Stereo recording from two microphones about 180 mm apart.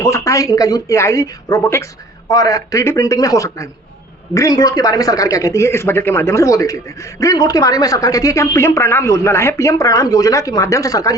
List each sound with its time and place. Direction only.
0.0 s a man's voice: 15° left (ahead or behind)